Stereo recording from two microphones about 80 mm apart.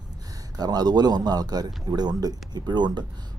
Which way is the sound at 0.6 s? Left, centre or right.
Right.